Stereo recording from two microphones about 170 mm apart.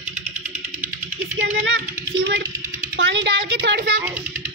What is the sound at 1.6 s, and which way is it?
Speech, 90° right.